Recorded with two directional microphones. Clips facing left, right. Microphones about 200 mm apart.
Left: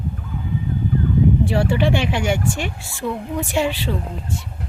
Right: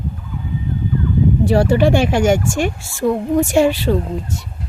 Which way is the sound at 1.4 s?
40° right (ahead or behind).